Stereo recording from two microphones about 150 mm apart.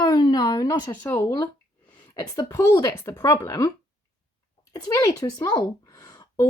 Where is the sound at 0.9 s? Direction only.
10° left (ahead or behind).